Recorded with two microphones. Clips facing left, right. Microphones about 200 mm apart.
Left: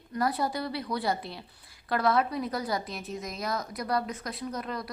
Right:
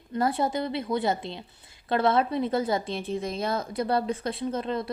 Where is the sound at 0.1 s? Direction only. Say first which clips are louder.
Right 3 dB; 25° right (ahead or behind).